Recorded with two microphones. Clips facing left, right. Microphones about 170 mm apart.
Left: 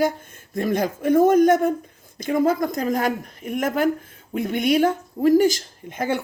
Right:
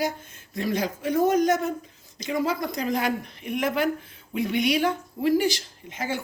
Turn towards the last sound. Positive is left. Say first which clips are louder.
# left 6 dB
turn(degrees=55)  # may be behind; listen again after turning